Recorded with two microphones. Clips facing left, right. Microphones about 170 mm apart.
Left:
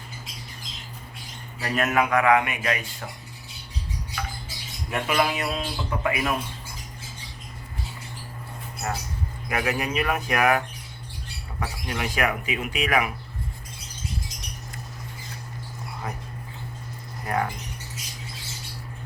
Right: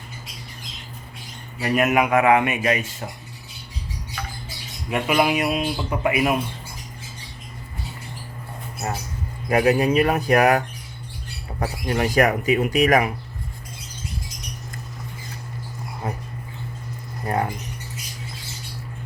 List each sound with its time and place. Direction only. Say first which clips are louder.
1.6 s a man's voice: right 4 dB; 10° right (ahead or behind)
4.9 s speech: right 4 dB; 10° right (ahead or behind)
9.5 s speech: right 9 dB; 35° right (ahead or behind)
11.6 s speech: right 7 dB; 40° right (ahead or behind)
16.0 s a sound: right 5 dB; 25° right (ahead or behind)
17.2 s mouse: right 3 dB; 30° right (ahead or behind)